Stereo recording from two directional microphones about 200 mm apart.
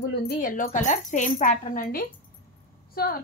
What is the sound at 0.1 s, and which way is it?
Speech, 45° left (ahead or behind).